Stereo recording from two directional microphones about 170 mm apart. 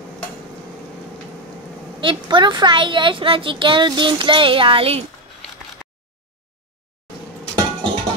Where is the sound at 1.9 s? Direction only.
30° right (ahead or behind).